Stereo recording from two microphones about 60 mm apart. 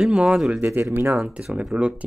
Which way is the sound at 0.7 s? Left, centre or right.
Right.